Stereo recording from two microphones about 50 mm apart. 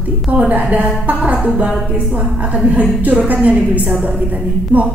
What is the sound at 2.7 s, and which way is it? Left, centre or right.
A woman's voice, right.